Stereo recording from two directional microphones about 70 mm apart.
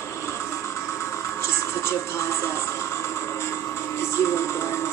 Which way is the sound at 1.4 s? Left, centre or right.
Left.